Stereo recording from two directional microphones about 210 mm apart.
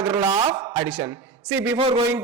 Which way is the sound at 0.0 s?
20° right (ahead or behind).